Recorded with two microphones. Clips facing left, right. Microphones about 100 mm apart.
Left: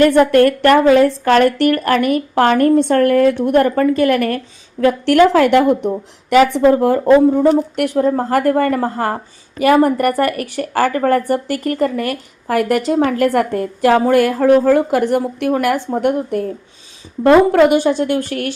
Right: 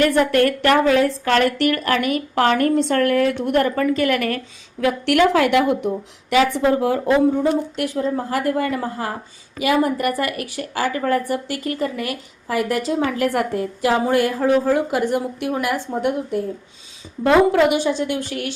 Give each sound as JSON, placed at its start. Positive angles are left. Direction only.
{"t": 0.1, "sound": "a woman's voice", "side_deg": 45}